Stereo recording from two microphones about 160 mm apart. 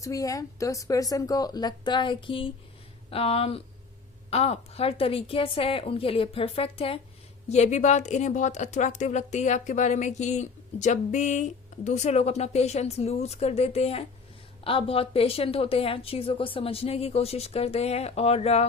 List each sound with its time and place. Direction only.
0.0 s a woman's voice: 20° left (ahead or behind)
7.5 s a woman's voice: 45° left (ahead or behind)